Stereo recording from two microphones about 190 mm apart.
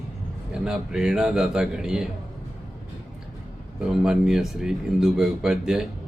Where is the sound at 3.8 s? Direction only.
5° right (ahead or behind).